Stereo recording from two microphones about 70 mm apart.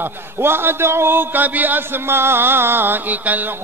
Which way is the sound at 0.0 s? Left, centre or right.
Right.